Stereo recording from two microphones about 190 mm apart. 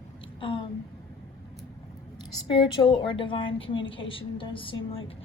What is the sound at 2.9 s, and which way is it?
A woman's voice, 25° left (ahead or behind).